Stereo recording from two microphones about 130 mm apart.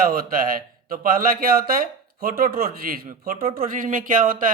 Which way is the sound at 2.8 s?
90° right.